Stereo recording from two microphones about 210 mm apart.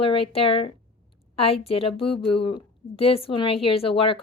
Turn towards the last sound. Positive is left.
turn(degrees=25)  # may be behind; listen again after turning